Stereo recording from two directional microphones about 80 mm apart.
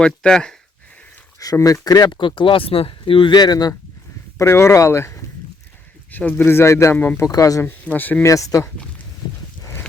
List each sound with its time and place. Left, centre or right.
0.0 s speech: centre
1.6 s speech: left
4.4 s speech: left
6.1 s speech: left
6.9 s speech: centre
7.3 s speech: left
7.9 s speech: left
8.2 s speech: left